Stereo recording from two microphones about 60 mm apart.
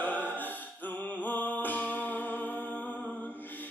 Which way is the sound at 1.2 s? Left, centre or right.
Left.